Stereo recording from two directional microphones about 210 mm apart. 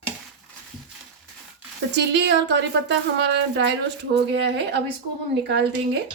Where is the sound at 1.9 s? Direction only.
55° right (ahead or behind).